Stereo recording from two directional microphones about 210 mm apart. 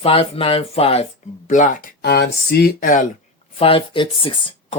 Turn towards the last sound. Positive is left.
turn(degrees=25)  # may be behind; listen again after turning